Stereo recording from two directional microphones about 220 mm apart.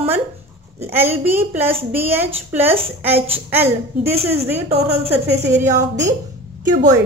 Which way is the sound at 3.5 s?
10° right (ahead or behind).